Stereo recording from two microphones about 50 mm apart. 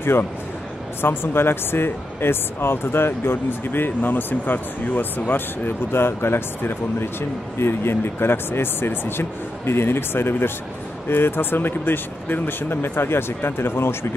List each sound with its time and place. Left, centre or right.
0.0 s speech: left